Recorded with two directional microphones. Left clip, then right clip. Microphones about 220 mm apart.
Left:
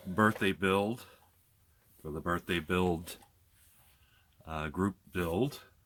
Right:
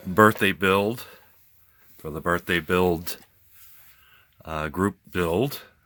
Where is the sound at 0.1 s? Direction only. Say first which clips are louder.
Right 11 dB; 45° right (ahead or behind); by 3.2 s 30° right (ahead or behind).